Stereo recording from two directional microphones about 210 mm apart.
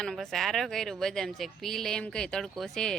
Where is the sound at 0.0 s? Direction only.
Centre (ahead or behind).